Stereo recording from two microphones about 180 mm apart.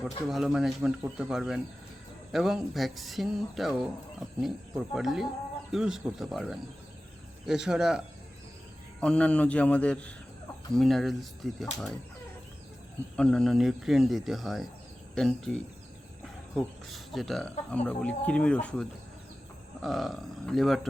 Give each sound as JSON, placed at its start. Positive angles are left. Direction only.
{"t": 0.3, "sound": "speech", "side_deg": 0}
{"t": 13.1, "sound": "speech", "side_deg": 5}